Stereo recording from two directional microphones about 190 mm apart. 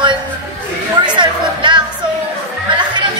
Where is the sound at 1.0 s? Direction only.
25° right (ahead or behind).